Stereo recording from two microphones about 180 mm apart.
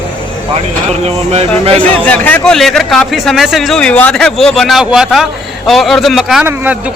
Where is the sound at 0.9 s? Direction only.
35° right (ahead or behind).